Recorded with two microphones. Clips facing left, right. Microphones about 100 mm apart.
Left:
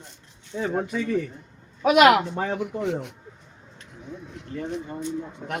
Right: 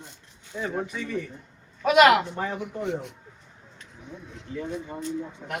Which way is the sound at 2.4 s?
90° left.